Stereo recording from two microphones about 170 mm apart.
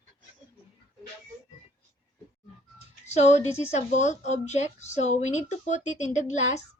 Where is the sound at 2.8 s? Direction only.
40° left (ahead or behind).